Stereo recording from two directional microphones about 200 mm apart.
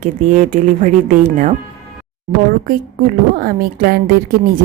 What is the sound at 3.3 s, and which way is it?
Speech, 45° right (ahead or behind).